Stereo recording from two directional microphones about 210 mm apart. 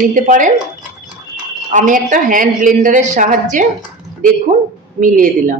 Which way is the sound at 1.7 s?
35° right (ahead or behind).